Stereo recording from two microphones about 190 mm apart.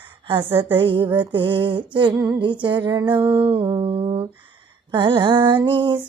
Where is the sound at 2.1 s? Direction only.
15° right (ahead or behind).